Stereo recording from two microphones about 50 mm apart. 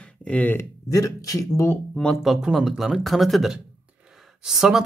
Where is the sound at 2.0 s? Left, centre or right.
Centre.